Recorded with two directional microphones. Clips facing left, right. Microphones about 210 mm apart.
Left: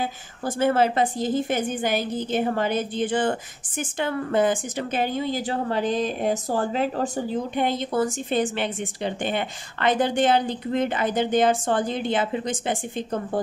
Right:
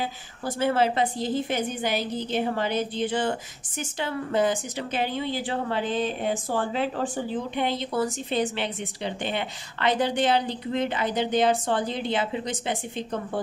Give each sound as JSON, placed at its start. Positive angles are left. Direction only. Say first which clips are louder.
{"t": 0.6, "sound": "a woman's voice", "louder": "left 3 dB", "side_deg": 50}